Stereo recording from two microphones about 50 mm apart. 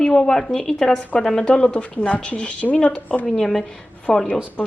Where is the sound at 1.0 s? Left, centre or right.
Left.